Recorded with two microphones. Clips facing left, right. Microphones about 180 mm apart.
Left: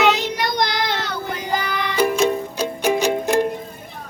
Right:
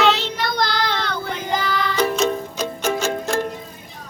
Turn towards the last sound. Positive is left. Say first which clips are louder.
# left 4 dB
turn(degrees=15)  # may be behind; listen again after turning